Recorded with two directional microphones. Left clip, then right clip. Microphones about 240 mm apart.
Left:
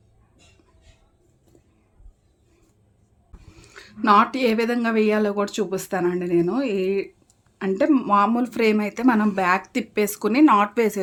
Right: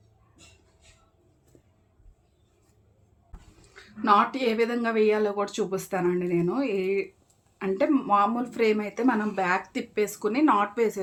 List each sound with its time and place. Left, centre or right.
3.8 s speech: left